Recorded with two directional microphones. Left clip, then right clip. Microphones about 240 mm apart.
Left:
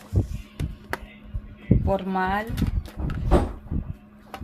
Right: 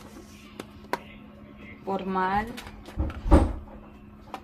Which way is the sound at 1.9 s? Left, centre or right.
Left.